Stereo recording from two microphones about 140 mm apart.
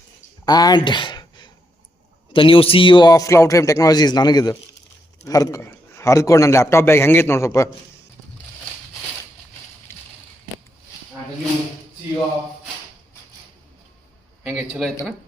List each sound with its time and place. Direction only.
0.4 s a man's voice: 30° left (ahead or behind)
9.9 s a sound: 20° left (ahead or behind)
14.4 s speech: 5° right (ahead or behind)